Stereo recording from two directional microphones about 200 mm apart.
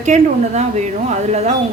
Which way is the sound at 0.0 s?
35° right (ahead or behind).